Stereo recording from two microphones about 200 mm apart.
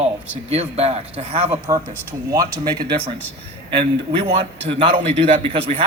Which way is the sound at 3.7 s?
30° right (ahead or behind).